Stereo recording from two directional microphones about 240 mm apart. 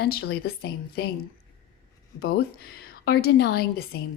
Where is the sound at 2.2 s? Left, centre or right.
Left.